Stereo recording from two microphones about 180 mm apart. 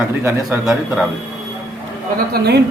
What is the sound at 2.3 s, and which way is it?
Speech, 65° right (ahead or behind).